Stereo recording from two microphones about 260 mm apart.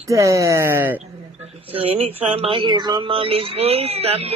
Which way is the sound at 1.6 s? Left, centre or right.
Right.